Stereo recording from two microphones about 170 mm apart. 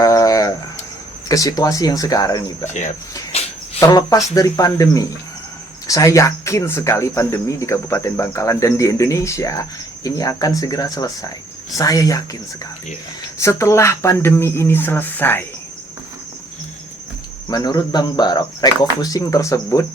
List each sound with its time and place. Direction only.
0.0 s a sound: 20° left (ahead or behind)
1.3 s speech: 20° left (ahead or behind)
3.3 s cricket: 35° left (ahead or behind)
3.8 s speech: 20° left (ahead or behind)
13.4 s speech: 15° left (ahead or behind)
17.5 s speech: 25° left (ahead or behind)